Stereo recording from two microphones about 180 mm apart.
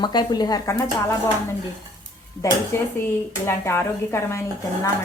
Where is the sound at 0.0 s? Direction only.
25° left (ahead or behind).